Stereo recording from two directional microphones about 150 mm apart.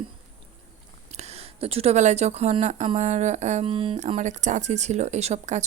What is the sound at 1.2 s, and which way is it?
Speech, 45° right (ahead or behind).